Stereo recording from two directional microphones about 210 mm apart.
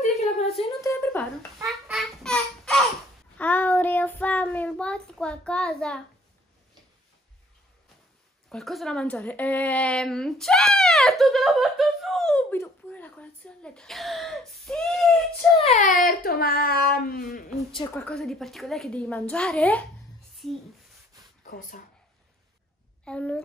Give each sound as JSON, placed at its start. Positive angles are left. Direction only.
{"t": 0.6, "sound": "a sound", "side_deg": 15}
{"t": 1.7, "sound": "a sound", "side_deg": 0}
{"t": 3.3, "sound": "child singing", "side_deg": 10}
{"t": 8.5, "sound": "speech", "side_deg": 0}
{"t": 15.6, "sound": "speech", "side_deg": 35}
{"t": 17.9, "sound": "a woman's voice", "side_deg": 5}
{"t": 21.5, "sound": "speech", "side_deg": 40}
{"t": 23.0, "sound": "a woman's voice", "side_deg": 5}